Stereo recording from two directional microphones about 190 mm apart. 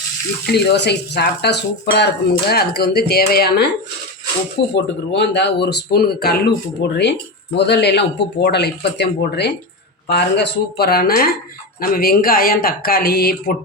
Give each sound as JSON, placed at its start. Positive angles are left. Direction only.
{"t": 0.4, "sound": "speech", "side_deg": 60}
{"t": 4.7, "sound": "speech", "side_deg": 65}